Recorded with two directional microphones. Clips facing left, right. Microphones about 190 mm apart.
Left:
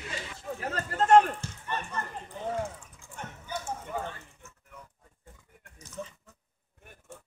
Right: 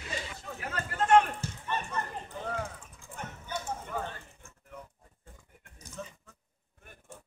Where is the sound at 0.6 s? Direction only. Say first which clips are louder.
Left 3 dB; 35° left (ahead or behind).